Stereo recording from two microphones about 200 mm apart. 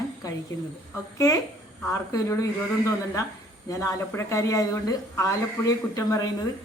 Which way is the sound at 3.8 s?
15° left (ahead or behind).